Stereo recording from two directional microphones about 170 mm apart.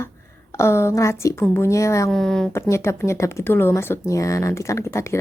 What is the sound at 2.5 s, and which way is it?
Speech, 15° left (ahead or behind).